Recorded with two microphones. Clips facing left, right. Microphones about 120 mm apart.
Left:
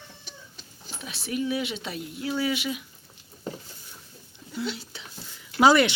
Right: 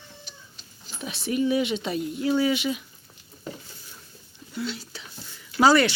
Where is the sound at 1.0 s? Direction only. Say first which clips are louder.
Right 5 dB; centre (ahead or behind).